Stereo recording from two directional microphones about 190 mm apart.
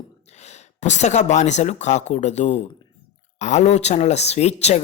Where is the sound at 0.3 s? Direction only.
35° left (ahead or behind).